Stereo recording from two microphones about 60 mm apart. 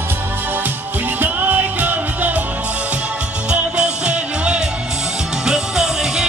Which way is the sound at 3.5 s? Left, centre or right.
Centre.